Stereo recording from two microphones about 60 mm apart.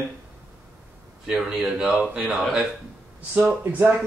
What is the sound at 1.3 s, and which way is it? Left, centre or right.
Speech, centre.